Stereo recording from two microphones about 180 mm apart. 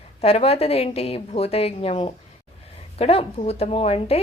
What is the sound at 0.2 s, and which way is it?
Speech, 35° left (ahead or behind).